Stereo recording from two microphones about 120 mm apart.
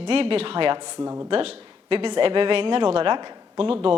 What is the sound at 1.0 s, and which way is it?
Speech, 25° right (ahead or behind).